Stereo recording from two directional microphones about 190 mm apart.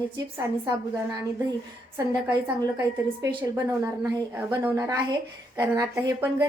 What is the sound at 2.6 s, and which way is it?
A woman's voice, 20° right (ahead or behind).